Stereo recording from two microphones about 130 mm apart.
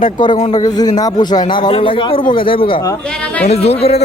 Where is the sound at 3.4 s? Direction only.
55° left (ahead or behind).